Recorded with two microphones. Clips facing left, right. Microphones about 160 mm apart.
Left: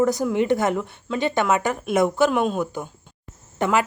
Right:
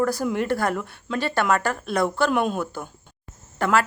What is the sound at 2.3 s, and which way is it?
Speech, 5° right (ahead or behind).